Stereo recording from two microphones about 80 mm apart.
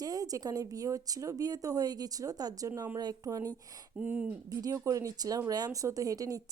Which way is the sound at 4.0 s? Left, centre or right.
Centre.